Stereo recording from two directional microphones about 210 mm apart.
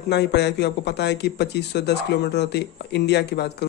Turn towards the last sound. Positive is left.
turn(degrees=50)  # may be behind; listen again after turning